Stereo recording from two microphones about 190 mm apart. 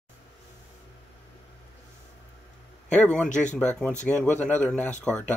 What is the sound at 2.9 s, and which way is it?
Speech, 5° left (ahead or behind).